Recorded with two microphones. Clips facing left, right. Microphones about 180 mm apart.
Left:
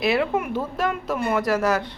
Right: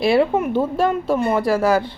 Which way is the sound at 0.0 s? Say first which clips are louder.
Right 5 dB; 30° right (ahead or behind).